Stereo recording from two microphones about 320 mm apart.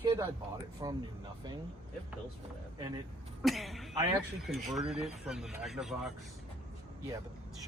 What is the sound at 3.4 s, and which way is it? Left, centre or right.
Speech, centre.